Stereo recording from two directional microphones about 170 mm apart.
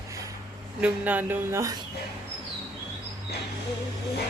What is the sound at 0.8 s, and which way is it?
Speech, 10° right (ahead or behind).